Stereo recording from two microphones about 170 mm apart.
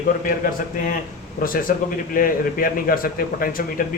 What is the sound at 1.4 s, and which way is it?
A man's voice, 55° left (ahead or behind).